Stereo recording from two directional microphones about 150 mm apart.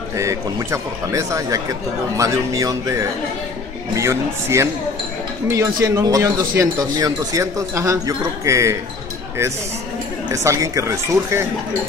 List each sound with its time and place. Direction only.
0.2 s speech: 20° right (ahead or behind)
10.3 s speech: 20° right (ahead or behind)